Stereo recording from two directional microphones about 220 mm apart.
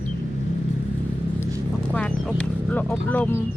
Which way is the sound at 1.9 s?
5° left (ahead or behind).